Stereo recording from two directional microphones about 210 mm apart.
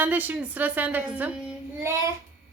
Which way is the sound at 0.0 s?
10° right (ahead or behind).